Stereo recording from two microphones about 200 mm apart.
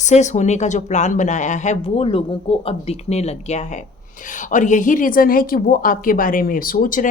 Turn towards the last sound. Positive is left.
turn(degrees=45)  # may be behind; listen again after turning